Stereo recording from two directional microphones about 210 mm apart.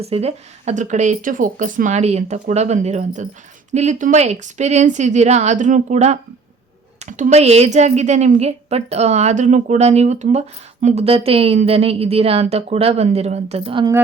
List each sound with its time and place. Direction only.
0.0 s a woman's voice: 30° right (ahead or behind)